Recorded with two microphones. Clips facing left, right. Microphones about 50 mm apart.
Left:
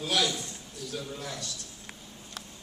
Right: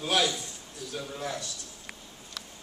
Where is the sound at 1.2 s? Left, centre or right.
Right.